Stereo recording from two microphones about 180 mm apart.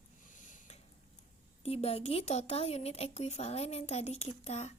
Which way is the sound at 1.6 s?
35° left (ahead or behind).